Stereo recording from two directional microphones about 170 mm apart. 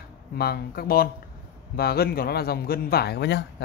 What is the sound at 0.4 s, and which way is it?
A man's voice, 65° left (ahead or behind).